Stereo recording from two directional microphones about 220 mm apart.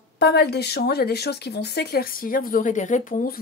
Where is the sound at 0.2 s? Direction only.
50° left (ahead or behind).